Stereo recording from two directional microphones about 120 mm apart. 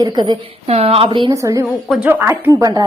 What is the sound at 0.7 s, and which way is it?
Speech, 55° right (ahead or behind).